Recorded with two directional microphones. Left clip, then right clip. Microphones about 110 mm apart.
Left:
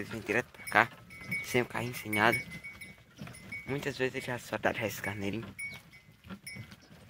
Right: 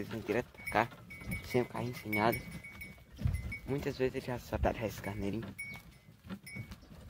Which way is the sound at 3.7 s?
5° right (ahead or behind).